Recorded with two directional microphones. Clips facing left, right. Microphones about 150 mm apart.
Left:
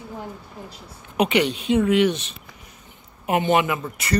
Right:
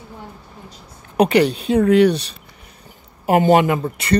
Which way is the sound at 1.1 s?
35° right (ahead or behind).